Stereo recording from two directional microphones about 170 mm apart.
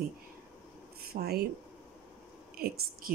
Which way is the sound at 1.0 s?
65° right (ahead or behind).